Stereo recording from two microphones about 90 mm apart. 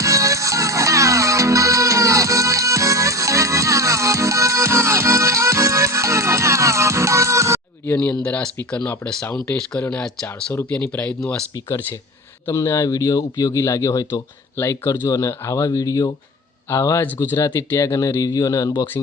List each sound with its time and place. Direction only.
0.0 s music: 35° right (ahead or behind)
8.1 s speech: 10° left (ahead or behind)
10.9 s speech: 15° left (ahead or behind)
12.5 s speech: 40° left (ahead or behind)
16.6 s speech: 35° left (ahead or behind)